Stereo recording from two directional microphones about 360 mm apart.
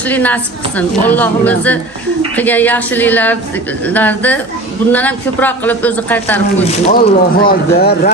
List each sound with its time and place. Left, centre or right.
0.1 s a woman's voice: centre
6.7 s speech: left